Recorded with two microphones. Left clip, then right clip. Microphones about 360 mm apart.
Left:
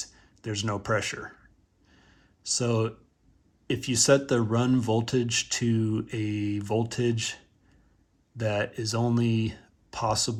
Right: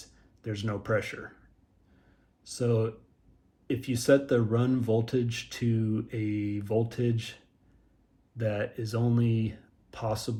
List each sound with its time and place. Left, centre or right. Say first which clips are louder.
0.0 s speech: left 4 dB; centre
2.4 s speech: left 2 dB; centre
8.4 s speech: left 3 dB; centre